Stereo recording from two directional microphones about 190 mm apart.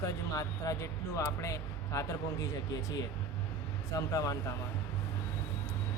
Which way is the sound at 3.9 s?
15° left (ahead or behind).